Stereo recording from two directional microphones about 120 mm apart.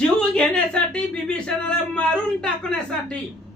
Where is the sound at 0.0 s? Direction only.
10° left (ahead or behind).